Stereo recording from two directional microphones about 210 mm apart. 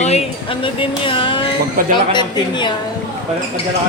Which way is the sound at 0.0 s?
30° left (ahead or behind).